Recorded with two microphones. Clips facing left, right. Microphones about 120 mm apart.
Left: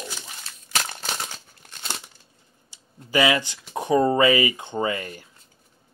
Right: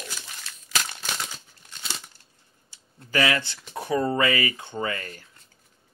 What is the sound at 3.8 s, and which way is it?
Speech, 20° left (ahead or behind).